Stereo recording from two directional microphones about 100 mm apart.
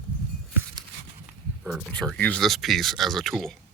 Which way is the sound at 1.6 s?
5° left (ahead or behind).